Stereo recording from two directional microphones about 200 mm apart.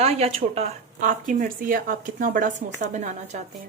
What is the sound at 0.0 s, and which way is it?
Speech, 30° right (ahead or behind).